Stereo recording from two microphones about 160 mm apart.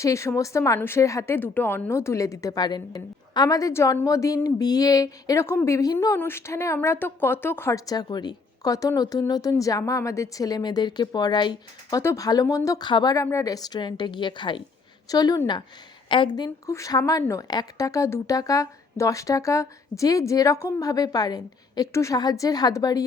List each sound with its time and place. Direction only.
0.0 s a woman's voice: 20° left (ahead or behind)